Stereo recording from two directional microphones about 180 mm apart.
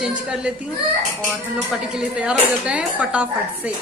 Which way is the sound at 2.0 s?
5° right (ahead or behind).